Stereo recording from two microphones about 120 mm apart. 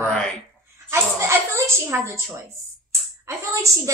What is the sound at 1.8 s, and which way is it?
Speech, 25° right (ahead or behind).